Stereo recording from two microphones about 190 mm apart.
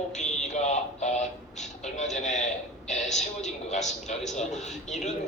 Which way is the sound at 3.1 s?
35° left (ahead or behind).